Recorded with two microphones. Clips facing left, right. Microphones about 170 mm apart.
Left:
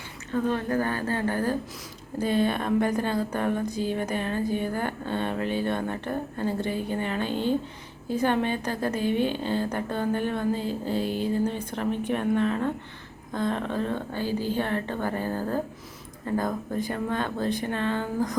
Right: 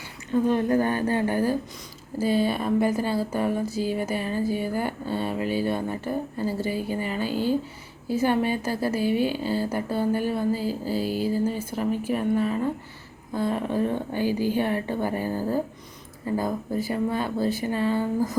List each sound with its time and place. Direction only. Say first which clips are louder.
0.3 s a woman's voice: right 4 dB; 15° right (ahead or behind)